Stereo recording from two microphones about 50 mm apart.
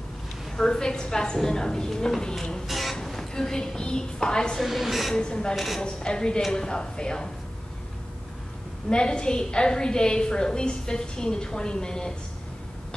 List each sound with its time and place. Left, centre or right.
0.6 s a woman's voice: centre
2.6 s a woman's voice: centre
4.6 s a woman's voice: centre
5.1 s a woman's voice: centre
8.8 s a woman's voice: centre